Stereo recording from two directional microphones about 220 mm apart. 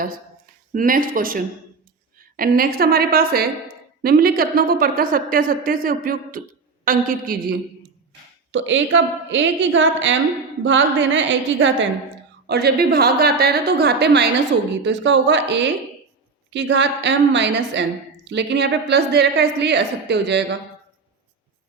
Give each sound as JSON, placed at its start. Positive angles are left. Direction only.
{"t": 0.0, "sound": "a woman's voice", "side_deg": -40}
{"t": 8.5, "sound": "a woman's voice", "side_deg": -60}
{"t": 12.5, "sound": "a woman's voice", "side_deg": -45}